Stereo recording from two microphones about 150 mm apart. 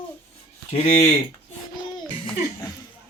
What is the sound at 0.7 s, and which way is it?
Speech, 45° left (ahead or behind).